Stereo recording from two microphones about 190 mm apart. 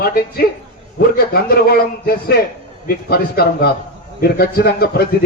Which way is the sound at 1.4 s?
55° left (ahead or behind).